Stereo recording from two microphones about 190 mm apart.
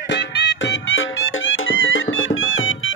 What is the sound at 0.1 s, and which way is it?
Music, 60° left (ahead or behind).